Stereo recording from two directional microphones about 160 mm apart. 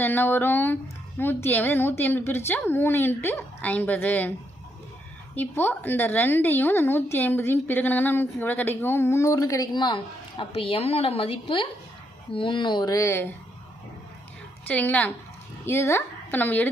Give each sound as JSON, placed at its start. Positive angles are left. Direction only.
{"t": 0.0, "sound": "speech", "side_deg": 10}
{"t": 5.3, "sound": "speech", "side_deg": 10}
{"t": 14.7, "sound": "speech", "side_deg": 10}